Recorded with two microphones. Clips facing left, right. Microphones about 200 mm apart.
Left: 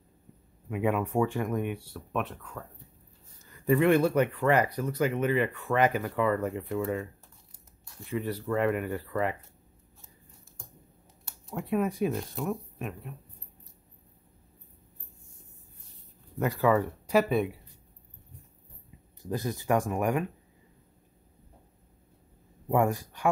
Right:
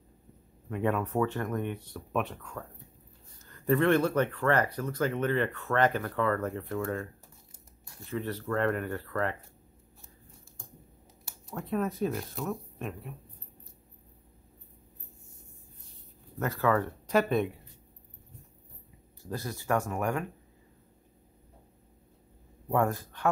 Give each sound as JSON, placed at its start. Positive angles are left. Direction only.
{"t": 0.7, "sound": "speech", "side_deg": 10}
{"t": 11.5, "sound": "speech", "side_deg": 10}
{"t": 12.1, "sound": "speech", "side_deg": 0}
{"t": 16.3, "sound": "speech", "side_deg": 15}
{"t": 19.2, "sound": "speech", "side_deg": 20}
{"t": 22.7, "sound": "speech", "side_deg": 15}